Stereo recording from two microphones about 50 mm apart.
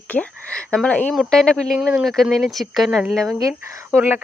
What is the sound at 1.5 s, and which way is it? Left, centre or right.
Speech, centre.